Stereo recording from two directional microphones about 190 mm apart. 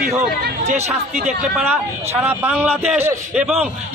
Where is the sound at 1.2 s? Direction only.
5° right (ahead or behind).